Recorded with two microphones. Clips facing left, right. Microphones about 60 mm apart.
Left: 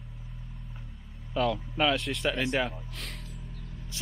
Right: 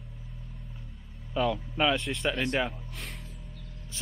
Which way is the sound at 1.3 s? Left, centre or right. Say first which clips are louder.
Even; centre.